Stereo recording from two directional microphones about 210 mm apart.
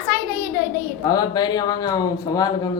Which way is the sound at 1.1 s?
20° left (ahead or behind).